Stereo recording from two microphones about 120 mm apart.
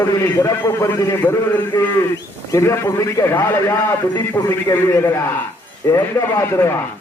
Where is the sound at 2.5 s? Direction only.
25° left (ahead or behind).